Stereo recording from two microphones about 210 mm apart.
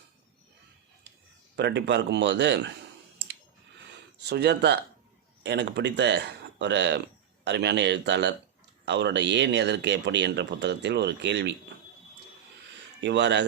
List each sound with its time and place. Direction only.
1.5 s speech: 55° right (ahead or behind)
4.2 s speech: 50° right (ahead or behind)
13.0 s speech: 55° right (ahead or behind)